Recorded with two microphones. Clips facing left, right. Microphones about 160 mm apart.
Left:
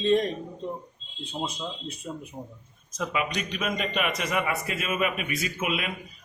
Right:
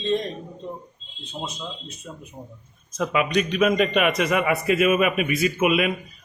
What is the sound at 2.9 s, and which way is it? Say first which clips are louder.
A man's voice: right 7 dB; 65° right (ahead or behind).